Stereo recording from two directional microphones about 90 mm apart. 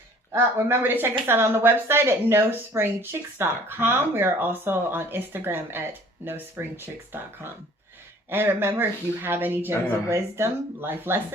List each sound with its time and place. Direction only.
0.3 s speech: 25° right (ahead or behind)
8.3 s speech: 25° right (ahead or behind)